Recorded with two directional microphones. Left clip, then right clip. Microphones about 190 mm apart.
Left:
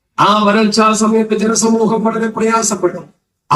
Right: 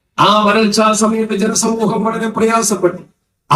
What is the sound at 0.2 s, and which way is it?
A man's voice, 25° right (ahead or behind).